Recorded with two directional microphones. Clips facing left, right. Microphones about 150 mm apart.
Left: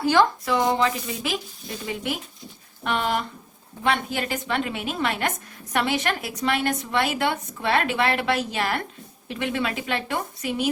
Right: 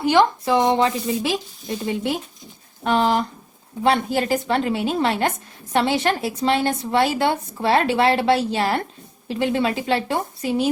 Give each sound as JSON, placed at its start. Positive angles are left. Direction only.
{"t": 0.0, "sound": "a woman's voice", "side_deg": -20}